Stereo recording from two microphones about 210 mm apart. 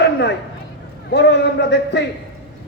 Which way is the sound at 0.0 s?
55° left (ahead or behind).